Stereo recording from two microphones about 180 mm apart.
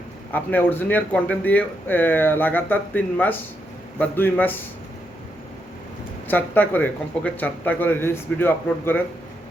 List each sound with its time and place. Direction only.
0.3 s speech: 10° left (ahead or behind)
6.2 s speech: 10° left (ahead or behind)